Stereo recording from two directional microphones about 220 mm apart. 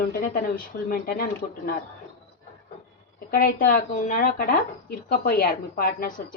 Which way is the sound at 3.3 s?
40° left (ahead or behind).